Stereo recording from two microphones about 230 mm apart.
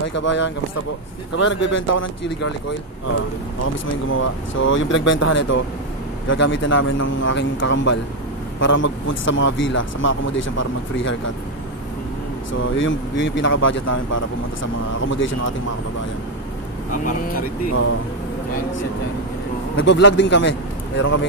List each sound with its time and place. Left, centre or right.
0.2 s a man's voice: left
3.6 s speech: left
5.1 s speech: left
6.2 s a man's voice: left
12.5 s speech: left
15.0 s speech: left
16.9 s speech: left
19.8 s a man's voice: left